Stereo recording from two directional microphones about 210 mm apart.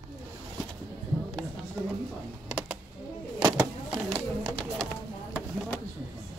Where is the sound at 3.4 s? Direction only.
15° right (ahead or behind).